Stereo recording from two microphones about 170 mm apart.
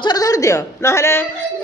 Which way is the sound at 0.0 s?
20° left (ahead or behind).